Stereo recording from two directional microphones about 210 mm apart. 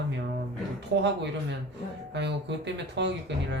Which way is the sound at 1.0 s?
55° right (ahead or behind).